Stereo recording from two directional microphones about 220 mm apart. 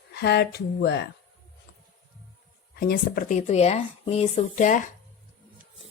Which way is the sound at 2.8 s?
40° left (ahead or behind).